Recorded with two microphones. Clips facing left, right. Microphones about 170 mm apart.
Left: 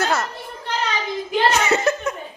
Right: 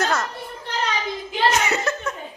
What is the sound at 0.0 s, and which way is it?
Children playing, 5° left (ahead or behind).